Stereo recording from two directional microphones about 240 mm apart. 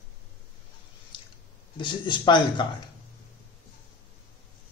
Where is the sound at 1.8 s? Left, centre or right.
Centre.